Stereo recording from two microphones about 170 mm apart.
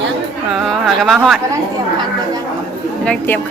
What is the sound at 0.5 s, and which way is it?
Speech, centre (ahead or behind).